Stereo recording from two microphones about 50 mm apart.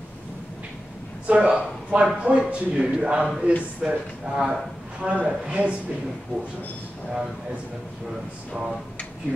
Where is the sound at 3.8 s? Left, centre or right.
Centre.